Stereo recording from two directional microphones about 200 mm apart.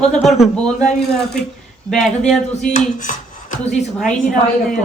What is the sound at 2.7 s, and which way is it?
Speech, 40° left (ahead or behind).